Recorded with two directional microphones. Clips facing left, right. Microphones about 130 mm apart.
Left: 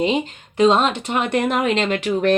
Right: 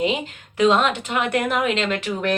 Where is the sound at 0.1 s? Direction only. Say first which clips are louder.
Left 4 dB; 30° left (ahead or behind).